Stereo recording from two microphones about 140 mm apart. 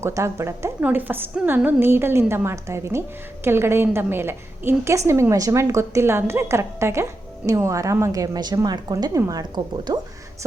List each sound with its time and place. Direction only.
0.0 s a woman's voice: 20° right (ahead or behind)